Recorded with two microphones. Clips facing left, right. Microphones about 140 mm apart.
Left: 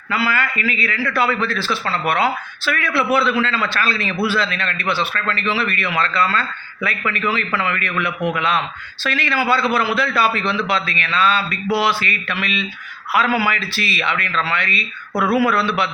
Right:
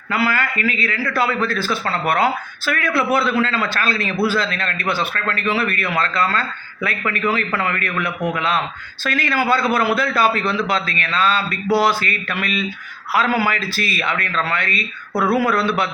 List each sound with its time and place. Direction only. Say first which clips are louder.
0.1 s a man's voice: right 1 dB; 50° right (ahead or behind)